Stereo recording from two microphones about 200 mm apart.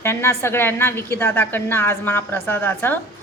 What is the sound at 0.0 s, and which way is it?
A woman's voice, 10° left (ahead or behind).